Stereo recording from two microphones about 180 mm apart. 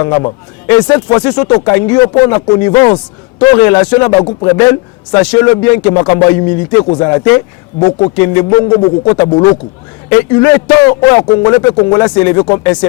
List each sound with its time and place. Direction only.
0.7 s a man's voice: 20° left (ahead or behind)
4.3 s a man's voice: 30° left (ahead or behind)
4.5 s a man's voice: 15° left (ahead or behind)